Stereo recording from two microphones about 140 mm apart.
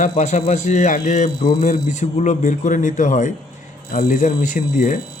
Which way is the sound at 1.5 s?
70° left (ahead or behind).